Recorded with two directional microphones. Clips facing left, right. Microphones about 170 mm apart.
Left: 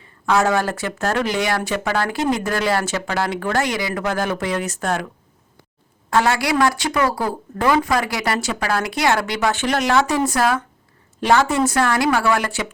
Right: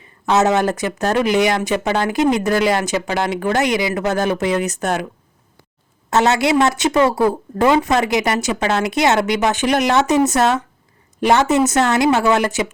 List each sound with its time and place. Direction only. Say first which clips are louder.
0.0 s speech: right 2 dB; 20° right (ahead or behind)
6.1 s speech: right 3 dB; 20° right (ahead or behind)